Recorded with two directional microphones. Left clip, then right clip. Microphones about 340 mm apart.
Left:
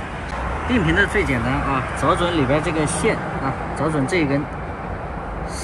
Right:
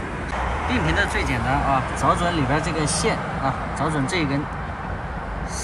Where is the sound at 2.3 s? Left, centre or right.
Right.